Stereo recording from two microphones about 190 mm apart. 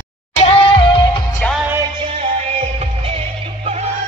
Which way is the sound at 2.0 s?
35° right (ahead or behind).